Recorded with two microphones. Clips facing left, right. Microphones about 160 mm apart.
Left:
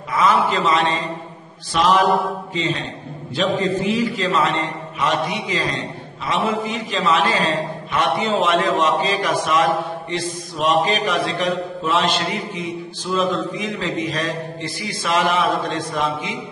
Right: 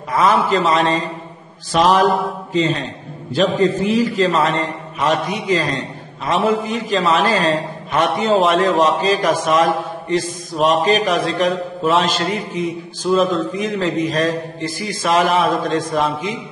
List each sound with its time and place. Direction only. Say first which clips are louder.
0.2 s a man's voice: right 2 dB; 40° right (ahead or behind)
1.7 s mantra: right 3 dB; 40° right (ahead or behind)
2.5 s a man's voice: right 5 dB; 40° right (ahead or behind)
5.5 s mantra: right 5 dB; 45° right (ahead or behind)
6.6 s a man's voice: right 4 dB; 45° right (ahead or behind)